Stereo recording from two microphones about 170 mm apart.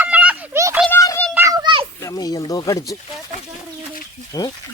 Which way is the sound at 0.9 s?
15° left (ahead or behind).